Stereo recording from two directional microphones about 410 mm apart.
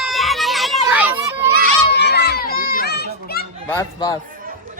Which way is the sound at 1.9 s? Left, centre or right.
Left.